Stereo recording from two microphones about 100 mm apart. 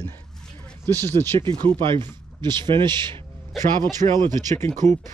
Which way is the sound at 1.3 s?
55° right (ahead or behind).